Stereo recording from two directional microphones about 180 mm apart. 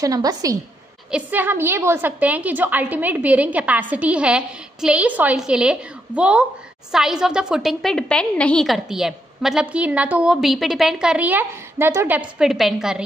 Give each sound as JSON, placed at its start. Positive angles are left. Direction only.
{"t": 0.0, "sound": "a woman's voice", "side_deg": -20}